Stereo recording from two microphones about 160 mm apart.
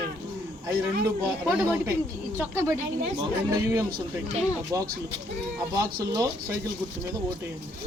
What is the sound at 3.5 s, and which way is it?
Speech, 20° right (ahead or behind).